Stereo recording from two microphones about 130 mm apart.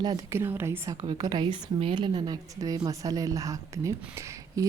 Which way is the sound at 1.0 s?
35° right (ahead or behind).